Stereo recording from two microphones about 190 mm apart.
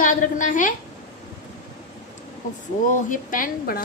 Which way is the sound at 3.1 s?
45° left (ahead or behind).